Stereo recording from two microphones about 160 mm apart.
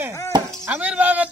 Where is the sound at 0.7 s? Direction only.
10° right (ahead or behind).